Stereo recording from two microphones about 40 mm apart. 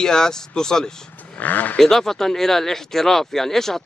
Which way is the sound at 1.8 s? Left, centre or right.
Centre.